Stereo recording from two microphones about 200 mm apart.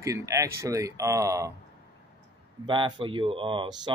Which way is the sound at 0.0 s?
15° right (ahead or behind).